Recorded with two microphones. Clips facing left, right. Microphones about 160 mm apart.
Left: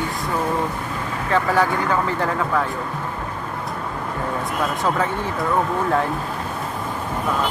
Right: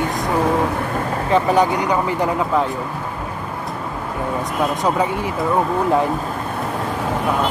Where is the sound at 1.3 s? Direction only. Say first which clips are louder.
Right 3 dB; 20° right (ahead or behind).